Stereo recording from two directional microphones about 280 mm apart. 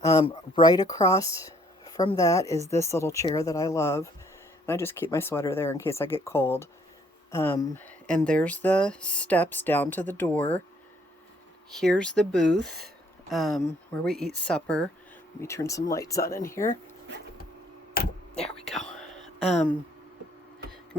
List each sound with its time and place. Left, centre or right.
0.0 s speech: centre
11.7 s speech: centre
14.0 s speech: centre
17.9 s a sound: left